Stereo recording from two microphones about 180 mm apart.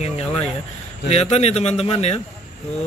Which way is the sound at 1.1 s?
35° left (ahead or behind).